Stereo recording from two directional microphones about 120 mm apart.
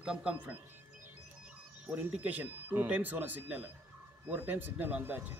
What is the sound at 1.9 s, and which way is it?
Speech, 15° right (ahead or behind).